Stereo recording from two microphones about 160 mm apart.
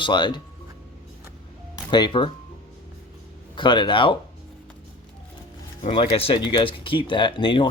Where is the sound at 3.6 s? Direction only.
30° left (ahead or behind).